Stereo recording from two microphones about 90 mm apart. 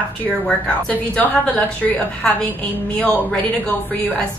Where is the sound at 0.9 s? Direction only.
20° left (ahead or behind).